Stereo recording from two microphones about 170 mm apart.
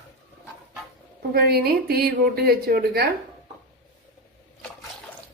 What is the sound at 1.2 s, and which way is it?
Speech, 65° right (ahead or behind).